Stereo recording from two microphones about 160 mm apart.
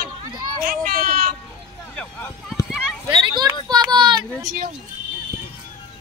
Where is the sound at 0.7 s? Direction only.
65° right (ahead or behind).